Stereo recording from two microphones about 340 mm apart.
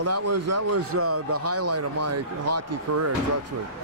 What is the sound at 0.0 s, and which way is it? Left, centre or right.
Speech, right.